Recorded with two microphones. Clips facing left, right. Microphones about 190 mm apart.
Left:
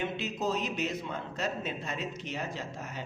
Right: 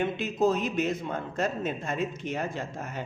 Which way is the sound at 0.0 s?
50° right (ahead or behind).